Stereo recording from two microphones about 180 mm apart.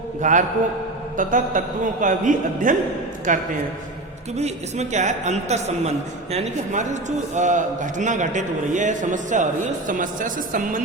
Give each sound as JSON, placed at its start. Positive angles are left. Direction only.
{"t": 0.2, "sound": "a man's voice", "side_deg": -45}